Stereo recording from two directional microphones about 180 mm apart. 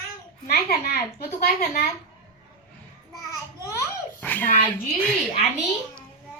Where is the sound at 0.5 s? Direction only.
60° left (ahead or behind).